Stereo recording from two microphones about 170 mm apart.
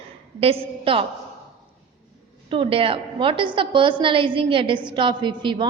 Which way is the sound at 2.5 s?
30° right (ahead or behind).